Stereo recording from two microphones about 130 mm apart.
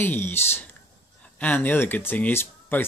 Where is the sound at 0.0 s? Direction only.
15° left (ahead or behind).